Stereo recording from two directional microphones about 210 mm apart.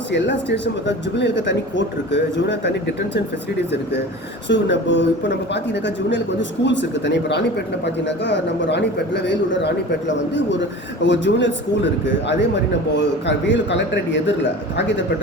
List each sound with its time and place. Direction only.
0.1 s a man's voice: 55° left (ahead or behind)
4.4 s a man's voice: 60° left (ahead or behind)
11.0 s a man's voice: 60° left (ahead or behind)